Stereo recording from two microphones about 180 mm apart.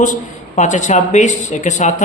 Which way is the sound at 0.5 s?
40° left (ahead or behind).